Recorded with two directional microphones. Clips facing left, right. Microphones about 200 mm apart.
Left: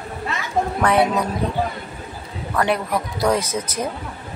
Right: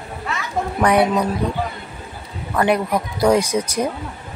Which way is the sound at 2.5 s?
10° right (ahead or behind).